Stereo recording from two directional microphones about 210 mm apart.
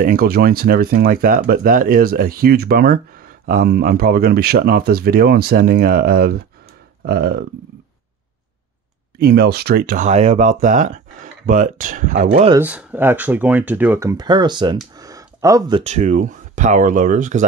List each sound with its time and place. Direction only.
0.0 s speech: 45° right (ahead or behind)
9.2 s speech: 50° right (ahead or behind)
12.5 s speech: 10° right (ahead or behind)
15.0 s a sound: 15° right (ahead or behind)
15.8 s speech: 35° right (ahead or behind)